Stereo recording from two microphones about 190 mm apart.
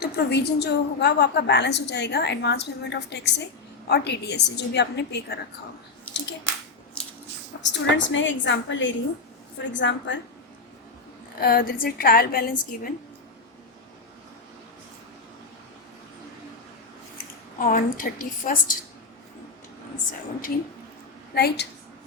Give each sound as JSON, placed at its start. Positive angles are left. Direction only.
{"t": 0.0, "sound": "a woman's voice", "side_deg": 55}
{"t": 7.6, "sound": "a woman's voice", "side_deg": 75}
{"t": 11.3, "sound": "a woman's voice", "side_deg": 50}
{"t": 17.6, "sound": "a woman's voice", "side_deg": 45}
{"t": 21.3, "sound": "a woman's voice", "side_deg": 60}